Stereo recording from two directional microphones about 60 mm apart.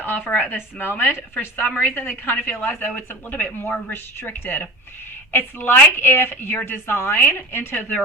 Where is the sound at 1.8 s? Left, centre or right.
Left.